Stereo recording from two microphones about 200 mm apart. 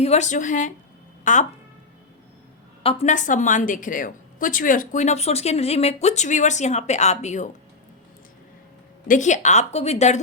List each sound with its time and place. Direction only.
0.0 s a woman's voice: 35° left (ahead or behind)
2.8 s a woman's voice: 35° left (ahead or behind)
9.0 s a woman's voice: 40° left (ahead or behind)